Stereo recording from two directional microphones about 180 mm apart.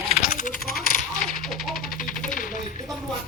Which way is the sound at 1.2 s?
Centre (ahead or behind).